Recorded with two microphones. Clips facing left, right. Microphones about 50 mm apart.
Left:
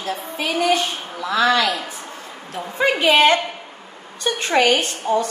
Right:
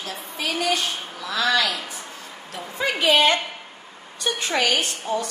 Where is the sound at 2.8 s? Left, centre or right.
Left.